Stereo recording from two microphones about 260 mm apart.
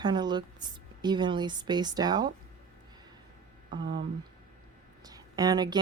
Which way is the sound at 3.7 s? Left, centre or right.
Centre.